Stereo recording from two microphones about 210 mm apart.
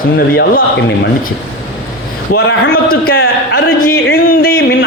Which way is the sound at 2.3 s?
45° left (ahead or behind).